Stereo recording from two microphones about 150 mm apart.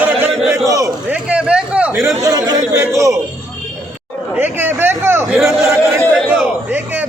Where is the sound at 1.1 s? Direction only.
5° right (ahead or behind); by 2.5 s 25° right (ahead or behind).